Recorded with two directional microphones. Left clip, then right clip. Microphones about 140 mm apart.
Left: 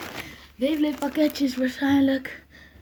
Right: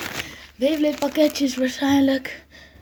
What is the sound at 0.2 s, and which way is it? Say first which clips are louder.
Speech: right 4 dB; 45° left (ahead or behind).